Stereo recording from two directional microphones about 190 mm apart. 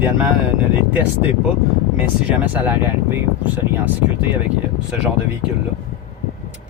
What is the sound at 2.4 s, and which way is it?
Speech, 10° right (ahead or behind).